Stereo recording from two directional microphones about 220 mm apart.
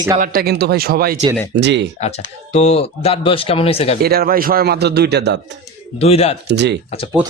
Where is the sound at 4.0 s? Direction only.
45° right (ahead or behind).